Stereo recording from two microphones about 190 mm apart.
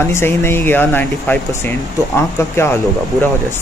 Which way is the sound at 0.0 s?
15° left (ahead or behind).